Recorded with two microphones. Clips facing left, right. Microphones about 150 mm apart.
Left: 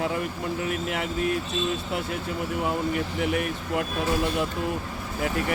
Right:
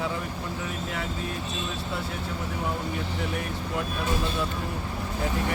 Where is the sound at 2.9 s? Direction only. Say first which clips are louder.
Left 5 dB; 70° left (ahead or behind).